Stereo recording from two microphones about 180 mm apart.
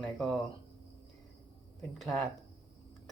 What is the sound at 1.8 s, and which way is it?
Speech, centre (ahead or behind).